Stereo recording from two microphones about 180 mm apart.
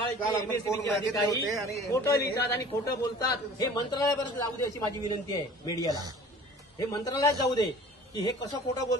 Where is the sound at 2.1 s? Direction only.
65° left (ahead or behind).